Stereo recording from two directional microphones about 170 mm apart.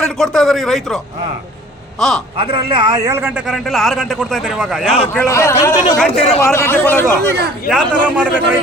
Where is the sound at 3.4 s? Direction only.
Centre (ahead or behind).